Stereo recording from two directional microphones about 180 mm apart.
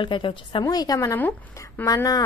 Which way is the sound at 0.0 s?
25° left (ahead or behind).